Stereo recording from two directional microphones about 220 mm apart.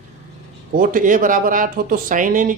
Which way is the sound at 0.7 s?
40° right (ahead or behind).